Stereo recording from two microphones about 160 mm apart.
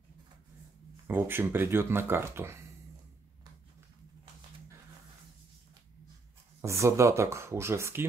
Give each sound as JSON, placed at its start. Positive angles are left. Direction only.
{"t": 1.0, "sound": "speech", "side_deg": -15}
{"t": 6.6, "sound": "speech", "side_deg": -20}